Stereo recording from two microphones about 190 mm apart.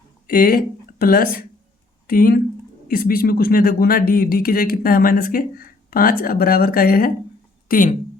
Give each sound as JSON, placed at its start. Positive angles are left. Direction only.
{"t": 0.3, "sound": "speech", "side_deg": 50}